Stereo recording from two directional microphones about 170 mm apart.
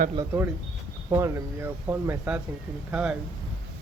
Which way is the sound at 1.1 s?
20° right (ahead or behind).